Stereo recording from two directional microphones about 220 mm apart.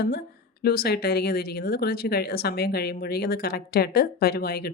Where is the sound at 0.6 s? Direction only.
45° left (ahead or behind).